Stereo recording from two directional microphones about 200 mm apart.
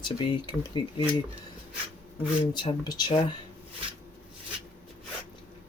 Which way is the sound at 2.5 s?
20° left (ahead or behind).